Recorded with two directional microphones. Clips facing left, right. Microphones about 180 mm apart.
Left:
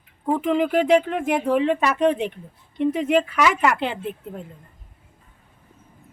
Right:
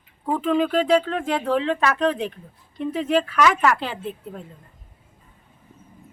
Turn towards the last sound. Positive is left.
turn(degrees=15)  # may be behind; listen again after turning